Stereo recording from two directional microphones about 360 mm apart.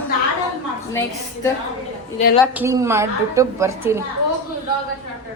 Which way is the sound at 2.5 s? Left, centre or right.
Centre.